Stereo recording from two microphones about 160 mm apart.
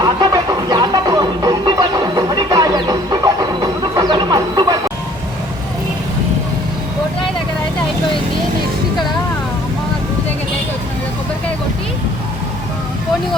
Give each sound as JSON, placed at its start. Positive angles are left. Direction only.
{"t": 0.0, "sound": "music", "side_deg": -25}